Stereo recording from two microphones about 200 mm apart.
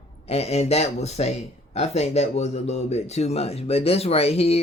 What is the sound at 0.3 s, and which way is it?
Speech, 30° left (ahead or behind).